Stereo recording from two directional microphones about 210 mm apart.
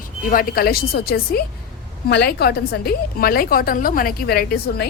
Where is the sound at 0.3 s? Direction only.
45° left (ahead or behind).